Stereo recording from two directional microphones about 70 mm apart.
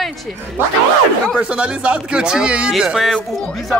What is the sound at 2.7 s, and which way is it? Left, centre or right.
Speech, centre.